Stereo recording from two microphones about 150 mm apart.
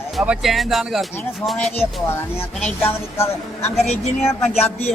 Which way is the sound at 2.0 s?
15° left (ahead or behind).